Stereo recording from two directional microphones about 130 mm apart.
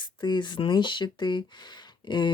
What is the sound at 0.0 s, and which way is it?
Speech, 35° left (ahead or behind).